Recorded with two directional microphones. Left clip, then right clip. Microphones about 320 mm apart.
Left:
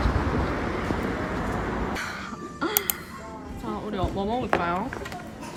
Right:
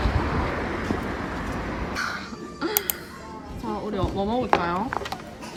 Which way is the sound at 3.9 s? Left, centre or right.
Centre.